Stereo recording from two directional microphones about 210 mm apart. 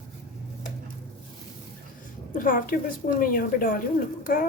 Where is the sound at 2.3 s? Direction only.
40° left (ahead or behind).